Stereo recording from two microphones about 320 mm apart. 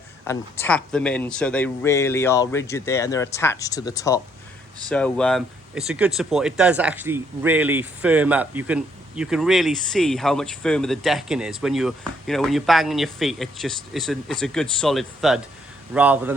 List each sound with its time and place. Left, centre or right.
0.3 s speech: centre